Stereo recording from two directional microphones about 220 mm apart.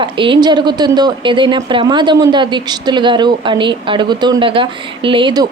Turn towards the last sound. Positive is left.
turn(degrees=-20)  # may be behind; listen again after turning